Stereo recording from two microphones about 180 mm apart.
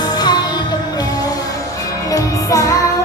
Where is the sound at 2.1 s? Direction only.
20° left (ahead or behind).